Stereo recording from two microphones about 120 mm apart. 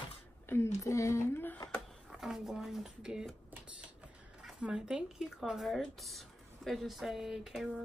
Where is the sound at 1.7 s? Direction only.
5° right (ahead or behind).